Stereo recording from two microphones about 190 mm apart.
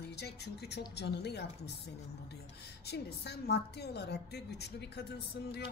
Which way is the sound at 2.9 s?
60° left (ahead or behind).